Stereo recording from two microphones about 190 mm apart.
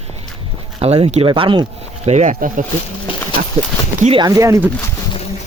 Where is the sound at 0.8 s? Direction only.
30° right (ahead or behind).